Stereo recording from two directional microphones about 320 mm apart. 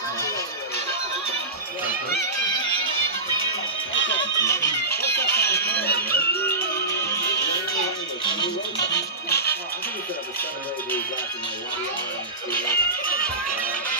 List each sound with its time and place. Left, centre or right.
3.9 s music: left
4.2 s music: centre
4.8 s music: left
6.1 s music: centre
8.7 s music: left
12.5 s music: left